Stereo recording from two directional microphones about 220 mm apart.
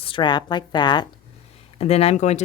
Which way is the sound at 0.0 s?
20° left (ahead or behind).